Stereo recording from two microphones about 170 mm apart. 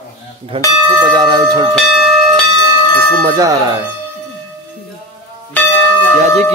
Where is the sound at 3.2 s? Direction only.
20° right (ahead or behind).